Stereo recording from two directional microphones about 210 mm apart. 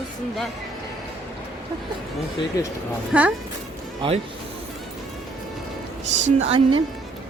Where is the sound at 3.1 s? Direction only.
5° right (ahead or behind).